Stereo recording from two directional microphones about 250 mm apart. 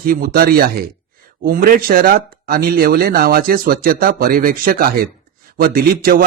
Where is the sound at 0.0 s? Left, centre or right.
Right.